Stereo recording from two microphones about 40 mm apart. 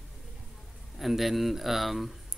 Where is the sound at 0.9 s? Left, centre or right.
Centre.